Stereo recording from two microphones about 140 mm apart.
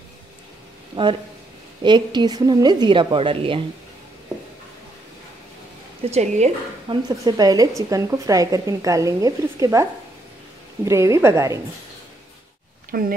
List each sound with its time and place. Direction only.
1.8 s a woman's voice: 35° right (ahead or behind)
6.0 s speech: 50° right (ahead or behind)
6.9 s a woman's voice: 30° right (ahead or behind)
12.9 s speech: 90° right